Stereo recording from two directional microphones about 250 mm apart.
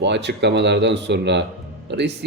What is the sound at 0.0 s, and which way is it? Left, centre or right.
Speech, right.